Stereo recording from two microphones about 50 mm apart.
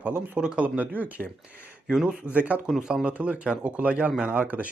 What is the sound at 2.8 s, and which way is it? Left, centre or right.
Speech, centre.